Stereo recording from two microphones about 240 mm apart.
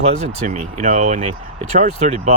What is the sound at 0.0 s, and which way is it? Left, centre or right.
Speech, right.